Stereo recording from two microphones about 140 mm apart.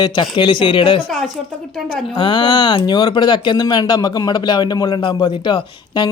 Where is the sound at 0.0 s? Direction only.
30° left (ahead or behind).